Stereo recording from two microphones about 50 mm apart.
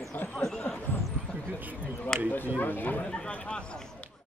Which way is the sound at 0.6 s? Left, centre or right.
Left.